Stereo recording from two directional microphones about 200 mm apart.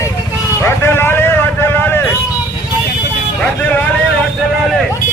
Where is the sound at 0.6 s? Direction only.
10° left (ahead or behind).